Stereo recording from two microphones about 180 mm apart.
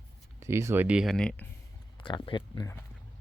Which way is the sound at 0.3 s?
15° right (ahead or behind).